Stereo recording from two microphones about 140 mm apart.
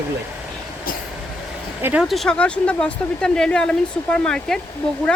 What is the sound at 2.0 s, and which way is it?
A woman's voice, centre (ahead or behind).